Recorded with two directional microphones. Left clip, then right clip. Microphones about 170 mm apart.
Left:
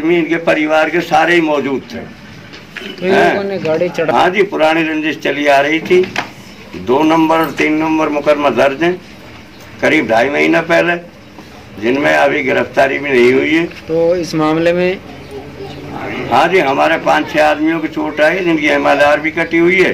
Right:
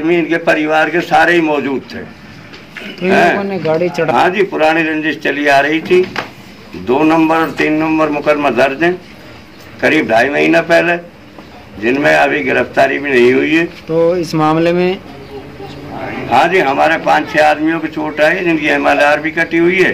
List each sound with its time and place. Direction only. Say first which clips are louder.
0.0 s a man's voice: even; 5° right (ahead or behind)
3.1 s a man's voice: right 1 dB; 5° right (ahead or behind)
3.4 s speech: even; 80° right
4.1 s a man's voice: left 1 dB; 5° right (ahead or behind)
13.9 s speech: right 1 dB; 80° right
16.3 s a man's voice: even; 5° right (ahead or behind)